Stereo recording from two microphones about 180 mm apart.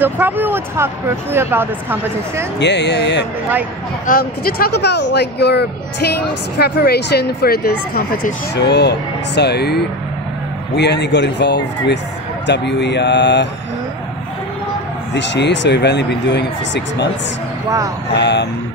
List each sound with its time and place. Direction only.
0.0 s speech: 10° right (ahead or behind)
2.6 s speech: 75° left (ahead or behind)
4.1 s speech: 55° left (ahead or behind)
10.8 s speech: 70° left (ahead or behind)
15.1 s speech: 75° left (ahead or behind)
18.1 s speech: 70° left (ahead or behind)